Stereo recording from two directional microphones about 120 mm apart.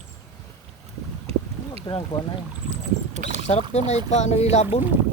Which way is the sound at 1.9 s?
35° left (ahead or behind).